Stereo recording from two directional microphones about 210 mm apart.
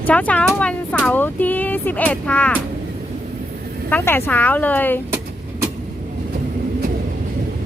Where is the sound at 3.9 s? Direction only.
10° left (ahead or behind).